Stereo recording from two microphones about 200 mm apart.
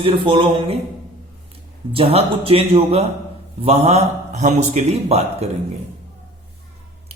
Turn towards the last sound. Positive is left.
turn(degrees=-30)  # may be behind; listen again after turning